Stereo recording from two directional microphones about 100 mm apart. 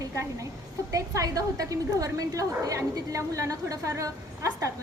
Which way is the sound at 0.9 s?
35° right (ahead or behind).